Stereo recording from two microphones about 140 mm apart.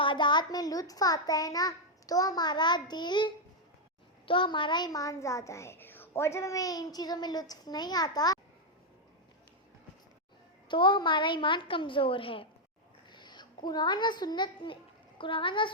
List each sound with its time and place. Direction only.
0.0 s speech: 35° left (ahead or behind)
10.7 s a woman's voice: 35° left (ahead or behind)
13.1 s a sound: 30° left (ahead or behind)
13.7 s a woman's voice: 30° left (ahead or behind)